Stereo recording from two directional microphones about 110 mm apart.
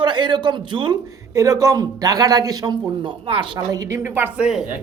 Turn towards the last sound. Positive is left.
turn(degrees=-5)  # may be behind; listen again after turning